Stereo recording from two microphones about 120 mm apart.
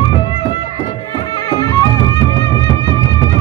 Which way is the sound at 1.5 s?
35° left (ahead or behind).